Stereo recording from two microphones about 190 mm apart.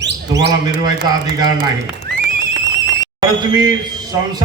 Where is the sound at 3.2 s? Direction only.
20° right (ahead or behind).